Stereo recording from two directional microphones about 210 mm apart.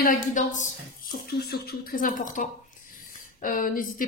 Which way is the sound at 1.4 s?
50° left (ahead or behind).